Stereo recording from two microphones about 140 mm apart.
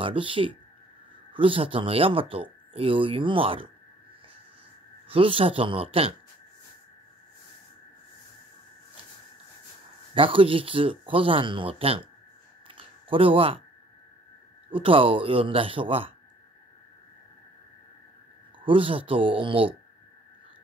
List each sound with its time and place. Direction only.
0.0 s speech: 40° right (ahead or behind)
5.0 s speech: 40° right (ahead or behind)
10.1 s speech: 40° right (ahead or behind)
12.6 s a sound: 40° right (ahead or behind)
14.7 s speech: 40° right (ahead or behind)
18.6 s speech: 40° right (ahead or behind)